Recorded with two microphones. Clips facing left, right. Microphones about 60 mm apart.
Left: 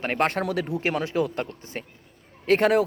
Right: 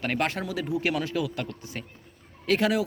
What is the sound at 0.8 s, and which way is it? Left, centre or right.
Speech, left.